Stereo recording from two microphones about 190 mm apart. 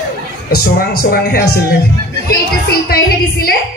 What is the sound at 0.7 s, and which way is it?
A woman's voice, 50° left (ahead or behind).